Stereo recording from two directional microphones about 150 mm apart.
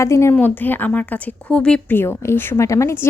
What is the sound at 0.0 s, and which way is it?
A woman's voice, 20° left (ahead or behind).